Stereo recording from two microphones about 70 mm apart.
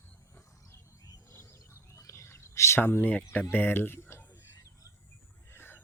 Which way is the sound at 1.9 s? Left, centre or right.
Left.